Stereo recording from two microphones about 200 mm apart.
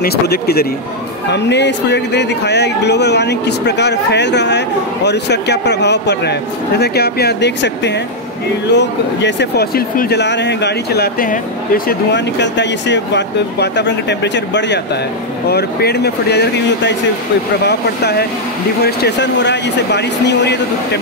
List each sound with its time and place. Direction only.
0.0 s speech: 50° left (ahead or behind)